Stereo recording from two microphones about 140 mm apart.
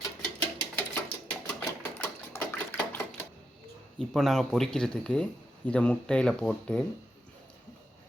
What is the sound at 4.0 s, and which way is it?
Speech, centre (ahead or behind).